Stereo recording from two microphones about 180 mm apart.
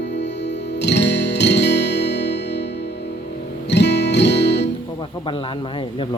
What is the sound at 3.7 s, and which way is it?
Music, 70° left (ahead or behind).